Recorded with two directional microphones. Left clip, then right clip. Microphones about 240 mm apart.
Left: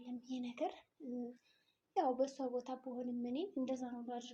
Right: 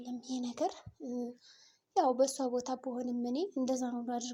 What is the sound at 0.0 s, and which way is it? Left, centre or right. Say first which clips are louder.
A child's voice: right 6 dB; right.